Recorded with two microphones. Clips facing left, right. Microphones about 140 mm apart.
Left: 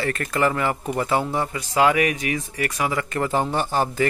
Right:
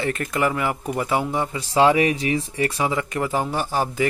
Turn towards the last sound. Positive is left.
turn(degrees=-10)  # may be behind; listen again after turning